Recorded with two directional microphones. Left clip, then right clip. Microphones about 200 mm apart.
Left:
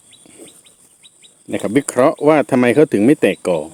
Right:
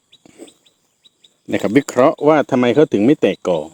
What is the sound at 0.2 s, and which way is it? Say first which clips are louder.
Chicken: right 2 dB; 15° right (ahead or behind).